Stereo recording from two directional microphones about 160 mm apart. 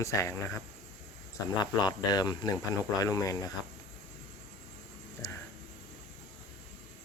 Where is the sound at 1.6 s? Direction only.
25° left (ahead or behind).